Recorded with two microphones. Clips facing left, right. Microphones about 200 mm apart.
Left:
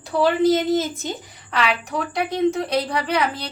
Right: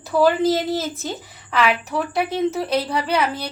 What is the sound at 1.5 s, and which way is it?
Speech, 5° right (ahead or behind).